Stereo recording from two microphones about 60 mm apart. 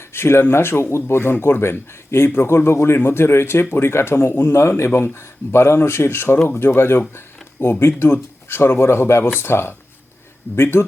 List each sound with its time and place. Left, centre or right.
0.0 s speech: left